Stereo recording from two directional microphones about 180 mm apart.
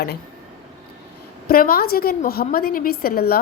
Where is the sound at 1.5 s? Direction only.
55° left (ahead or behind).